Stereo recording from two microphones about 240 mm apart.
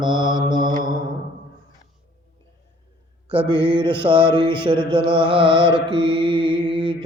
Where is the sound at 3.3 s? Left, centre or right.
Right.